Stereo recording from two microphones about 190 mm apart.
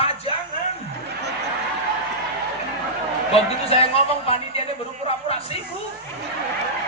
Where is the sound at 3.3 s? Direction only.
30° left (ahead or behind).